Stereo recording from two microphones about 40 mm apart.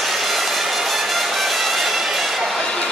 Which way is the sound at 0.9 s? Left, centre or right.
Centre.